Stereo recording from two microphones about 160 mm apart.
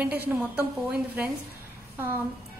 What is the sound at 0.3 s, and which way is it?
Speech, 10° right (ahead or behind).